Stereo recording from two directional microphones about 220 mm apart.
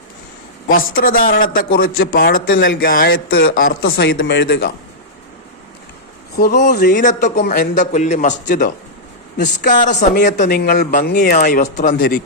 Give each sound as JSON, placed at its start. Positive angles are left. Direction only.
{"t": 0.7, "sound": "speech", "side_deg": 40}
{"t": 4.1, "sound": "speech", "side_deg": 60}
{"t": 6.3, "sound": "speech", "side_deg": 45}
{"t": 6.7, "sound": "speech", "side_deg": 35}
{"t": 7.4, "sound": "speech", "side_deg": 50}
{"t": 7.8, "sound": "speech", "side_deg": 35}